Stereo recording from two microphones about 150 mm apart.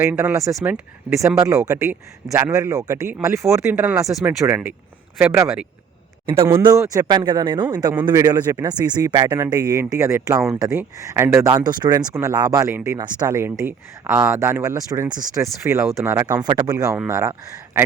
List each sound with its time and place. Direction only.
0.0 s speech: 10° right (ahead or behind)
11.5 s speech: 30° right (ahead or behind)